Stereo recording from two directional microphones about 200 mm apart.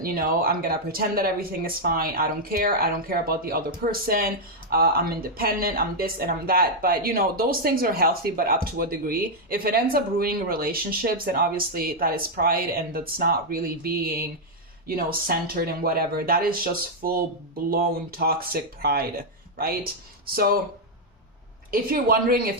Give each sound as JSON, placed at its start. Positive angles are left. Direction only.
{"t": 0.0, "sound": "speech", "side_deg": -45}
{"t": 21.7, "sound": "speech", "side_deg": -45}